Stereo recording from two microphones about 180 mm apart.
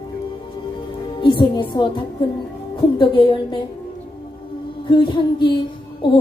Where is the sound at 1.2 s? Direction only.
25° left (ahead or behind).